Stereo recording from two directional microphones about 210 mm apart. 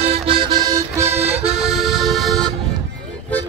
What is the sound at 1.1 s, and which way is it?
Music, 30° right (ahead or behind).